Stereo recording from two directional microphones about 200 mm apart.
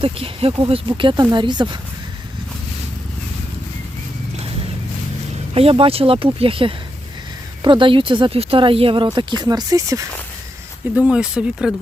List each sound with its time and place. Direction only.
0.0 s speech: 30° right (ahead or behind)
5.5 s speech: 30° right (ahead or behind)
10.9 s speech: 5° right (ahead or behind)